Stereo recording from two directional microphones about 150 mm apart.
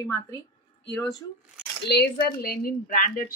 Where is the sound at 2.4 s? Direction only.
80° left.